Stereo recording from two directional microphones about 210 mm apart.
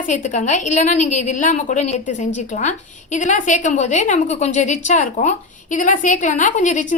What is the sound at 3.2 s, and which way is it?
A woman's voice, 35° left (ahead or behind).